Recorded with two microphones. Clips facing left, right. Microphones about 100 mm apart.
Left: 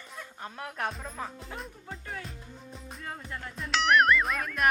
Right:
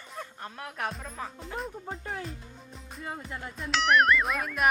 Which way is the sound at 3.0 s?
10° right (ahead or behind).